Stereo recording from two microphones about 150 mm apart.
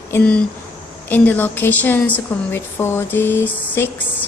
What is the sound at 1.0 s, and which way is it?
A woman's voice, 10° left (ahead or behind).